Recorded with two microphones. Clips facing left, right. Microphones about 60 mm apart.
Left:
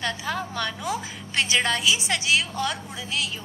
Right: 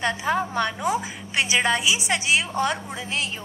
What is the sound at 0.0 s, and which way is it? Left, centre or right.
A woman's voice, right.